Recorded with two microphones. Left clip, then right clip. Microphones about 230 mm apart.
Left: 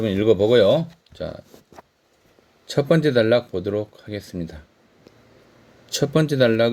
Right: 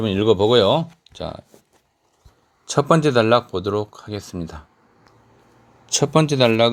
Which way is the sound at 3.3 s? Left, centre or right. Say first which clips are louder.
Right 2 dB; right.